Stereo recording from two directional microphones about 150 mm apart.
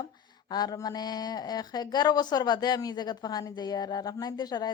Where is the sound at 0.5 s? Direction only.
25° left (ahead or behind).